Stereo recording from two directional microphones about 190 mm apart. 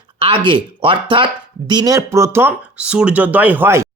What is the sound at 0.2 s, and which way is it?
Speech, 30° right (ahead or behind).